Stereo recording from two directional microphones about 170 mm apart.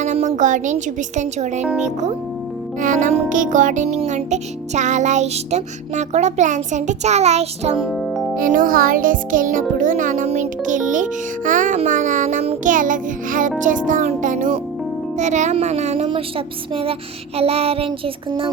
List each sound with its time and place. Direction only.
0.0 s a sound: 45° right (ahead or behind)
0.3 s music: 45° right (ahead or behind)
7.8 s music: centre (ahead or behind)
8.4 s music: 55° right (ahead or behind)
17.3 s child singing: 35° right (ahead or behind)